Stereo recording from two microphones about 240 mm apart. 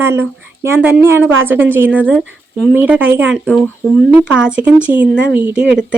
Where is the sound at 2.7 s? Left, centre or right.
Centre.